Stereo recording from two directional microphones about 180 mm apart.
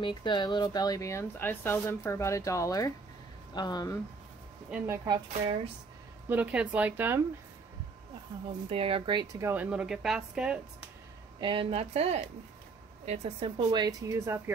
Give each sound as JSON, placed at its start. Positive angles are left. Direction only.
{"t": 0.0, "sound": "speech", "side_deg": 25}
{"t": 4.6, "sound": "speech", "side_deg": -5}
{"t": 4.9, "sound": "speech", "side_deg": -20}
{"t": 6.2, "sound": "a woman's voice", "side_deg": -10}
{"t": 8.6, "sound": "a woman's voice", "side_deg": -30}
{"t": 11.3, "sound": "speech", "side_deg": -30}